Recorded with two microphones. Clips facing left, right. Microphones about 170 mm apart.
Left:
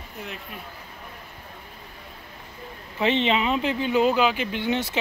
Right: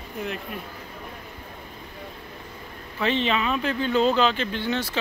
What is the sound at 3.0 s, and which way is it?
Speech, 20° left (ahead or behind).